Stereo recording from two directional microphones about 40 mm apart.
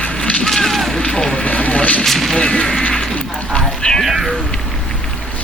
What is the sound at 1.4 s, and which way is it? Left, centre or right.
Vehicle, left.